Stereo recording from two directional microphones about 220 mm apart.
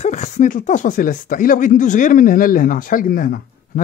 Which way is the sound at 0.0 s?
30° left (ahead or behind).